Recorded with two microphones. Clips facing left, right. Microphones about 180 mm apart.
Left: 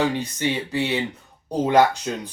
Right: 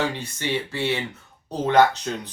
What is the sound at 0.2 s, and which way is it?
Speech, 15° left (ahead or behind).